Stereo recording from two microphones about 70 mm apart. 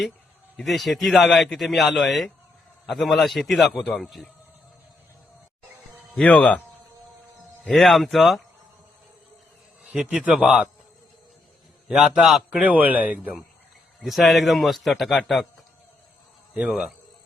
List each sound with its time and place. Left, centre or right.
0.6 s a man's voice: centre
6.2 s a man's voice: centre
7.6 s a man's voice: centre
9.9 s a man's voice: centre
11.9 s a man's voice: centre
12.6 s speech: right
14.0 s a man's voice: centre
16.6 s a man's voice: centre